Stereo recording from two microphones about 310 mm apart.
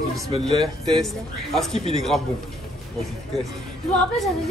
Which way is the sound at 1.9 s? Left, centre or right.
Centre.